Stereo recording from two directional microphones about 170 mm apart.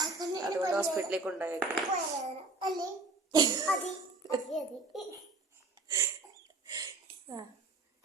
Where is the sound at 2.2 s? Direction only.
25° right (ahead or behind).